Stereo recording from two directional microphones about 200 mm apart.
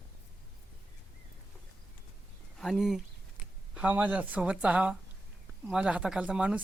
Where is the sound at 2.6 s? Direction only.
Centre (ahead or behind).